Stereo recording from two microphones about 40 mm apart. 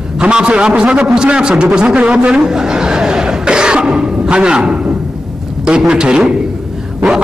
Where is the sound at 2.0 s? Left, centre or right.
Right.